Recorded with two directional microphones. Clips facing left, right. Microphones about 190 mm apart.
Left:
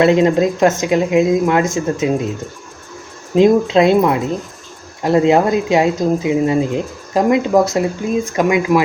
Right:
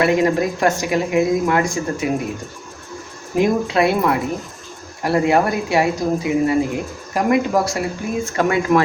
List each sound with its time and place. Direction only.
0.0 s speech: 20° left (ahead or behind)
3.3 s speech: 25° left (ahead or behind)